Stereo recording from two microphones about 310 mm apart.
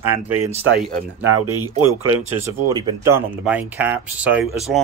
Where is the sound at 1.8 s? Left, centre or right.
Right.